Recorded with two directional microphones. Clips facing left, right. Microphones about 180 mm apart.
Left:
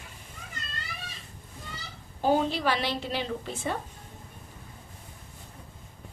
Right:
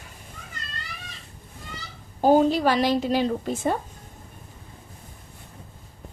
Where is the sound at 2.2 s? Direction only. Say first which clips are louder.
Right 7 dB; 45° right (ahead or behind).